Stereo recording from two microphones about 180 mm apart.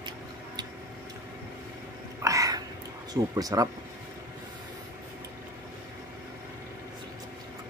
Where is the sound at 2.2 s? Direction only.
20° right (ahead or behind).